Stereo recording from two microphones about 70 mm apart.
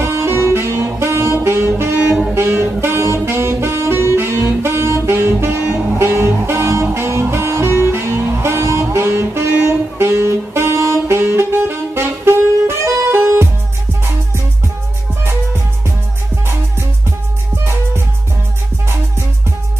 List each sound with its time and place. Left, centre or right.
0.0 s saxophone: right